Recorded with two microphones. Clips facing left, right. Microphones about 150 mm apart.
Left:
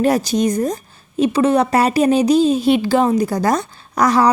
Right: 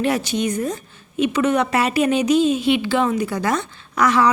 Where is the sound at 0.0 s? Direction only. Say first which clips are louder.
Left 5 dB; 40° left (ahead or behind).